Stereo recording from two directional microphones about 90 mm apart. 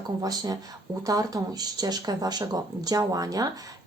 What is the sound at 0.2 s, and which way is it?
Speech, 45° right (ahead or behind).